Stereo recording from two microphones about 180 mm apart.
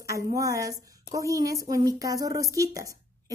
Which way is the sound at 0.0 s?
20° right (ahead or behind).